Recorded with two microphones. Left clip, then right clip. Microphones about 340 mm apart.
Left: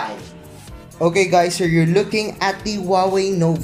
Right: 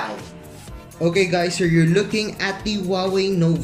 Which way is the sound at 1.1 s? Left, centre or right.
Centre.